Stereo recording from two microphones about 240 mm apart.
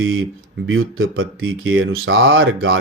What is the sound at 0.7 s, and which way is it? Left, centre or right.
Speech, right.